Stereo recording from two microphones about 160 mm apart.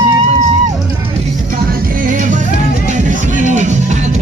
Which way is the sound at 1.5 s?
65° right (ahead or behind).